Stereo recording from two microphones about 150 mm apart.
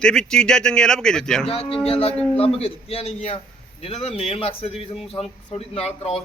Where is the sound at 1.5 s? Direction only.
40° left (ahead or behind).